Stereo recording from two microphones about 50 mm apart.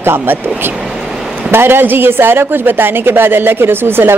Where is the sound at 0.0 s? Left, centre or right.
Right.